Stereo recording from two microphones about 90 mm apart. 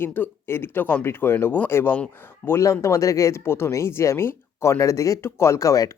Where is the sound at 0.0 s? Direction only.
20° left (ahead or behind).